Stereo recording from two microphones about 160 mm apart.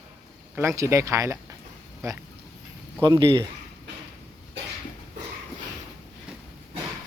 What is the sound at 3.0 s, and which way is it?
Speech, 30° right (ahead or behind).